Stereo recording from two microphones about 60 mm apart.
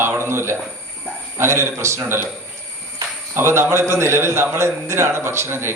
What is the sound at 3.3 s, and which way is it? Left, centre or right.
A man's voice, right.